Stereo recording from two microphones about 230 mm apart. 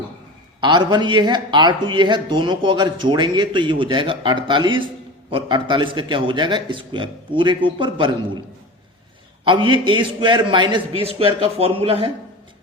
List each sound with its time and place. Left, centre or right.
0.6 s speech: centre
9.4 s speech: right